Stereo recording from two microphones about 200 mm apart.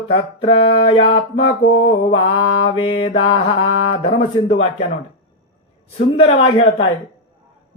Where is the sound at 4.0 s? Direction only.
30° left (ahead or behind).